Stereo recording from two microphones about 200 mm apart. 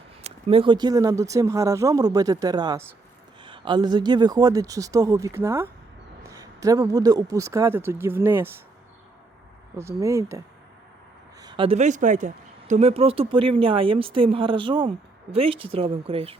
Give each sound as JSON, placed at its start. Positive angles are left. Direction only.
{"t": 0.2, "sound": "speech", "side_deg": -30}
{"t": 9.7, "sound": "speech", "side_deg": -15}